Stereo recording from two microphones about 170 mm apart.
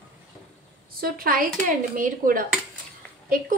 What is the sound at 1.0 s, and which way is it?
A woman's voice, 60° right (ahead or behind).